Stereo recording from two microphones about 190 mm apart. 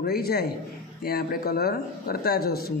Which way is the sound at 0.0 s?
55° left (ahead or behind).